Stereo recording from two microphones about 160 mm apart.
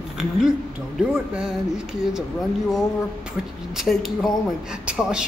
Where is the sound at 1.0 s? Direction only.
5° right (ahead or behind).